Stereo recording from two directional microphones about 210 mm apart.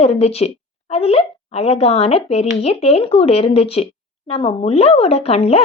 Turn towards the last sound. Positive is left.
turn(degrees=30)  # may be behind; listen again after turning